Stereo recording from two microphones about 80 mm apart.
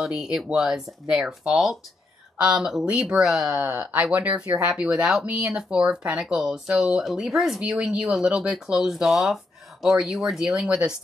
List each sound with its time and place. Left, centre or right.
0.0 s speech: centre
3.7 s speech: centre